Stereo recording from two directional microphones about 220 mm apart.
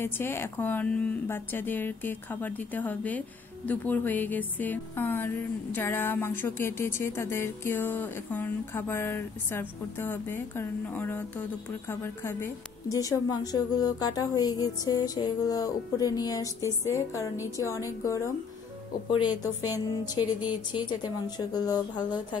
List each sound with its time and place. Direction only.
0.0 s a woman's voice: 10° left (ahead or behind)
19.6 s a sound: 10° right (ahead or behind)
20.7 s a woman's voice: 20° left (ahead or behind)